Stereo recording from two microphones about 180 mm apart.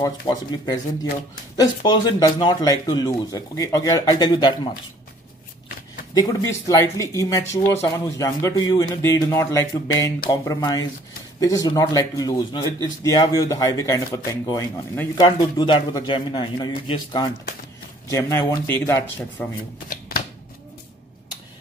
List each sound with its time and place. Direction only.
0.0 s speech: 20° left (ahead or behind)
1.8 s speech: 25° left (ahead or behind)
6.1 s speech: 20° left (ahead or behind)
19.9 s shuffling cards: 55° left (ahead or behind)